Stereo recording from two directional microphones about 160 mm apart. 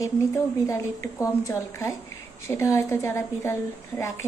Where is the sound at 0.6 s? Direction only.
15° left (ahead or behind).